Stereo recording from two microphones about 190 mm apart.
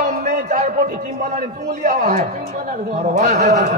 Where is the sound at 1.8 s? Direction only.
40° right (ahead or behind).